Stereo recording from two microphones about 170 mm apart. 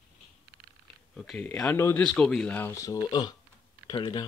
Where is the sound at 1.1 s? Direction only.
5° left (ahead or behind); by 4.2 s 25° left (ahead or behind).